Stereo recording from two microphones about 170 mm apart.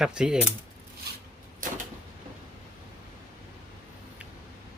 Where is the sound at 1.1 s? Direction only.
70° right (ahead or behind).